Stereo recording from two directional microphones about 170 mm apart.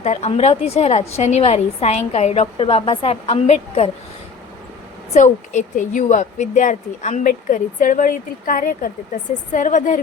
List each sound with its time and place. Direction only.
0.0 s a woman's voice: 40° left (ahead or behind)
5.1 s a woman's voice: 45° left (ahead or behind)